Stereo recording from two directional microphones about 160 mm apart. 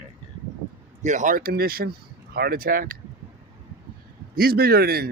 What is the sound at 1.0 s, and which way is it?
Speech, 50° right (ahead or behind).